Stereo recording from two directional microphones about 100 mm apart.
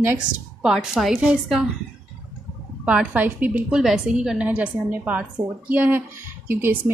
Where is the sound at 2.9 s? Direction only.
15° right (ahead or behind).